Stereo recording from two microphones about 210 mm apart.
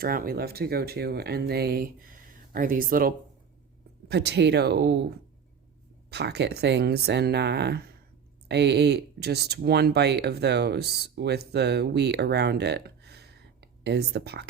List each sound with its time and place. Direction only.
0.0 s speech: 45° right (ahead or behind)
4.1 s speech: 50° right (ahead or behind)
6.1 s speech: 50° right (ahead or behind)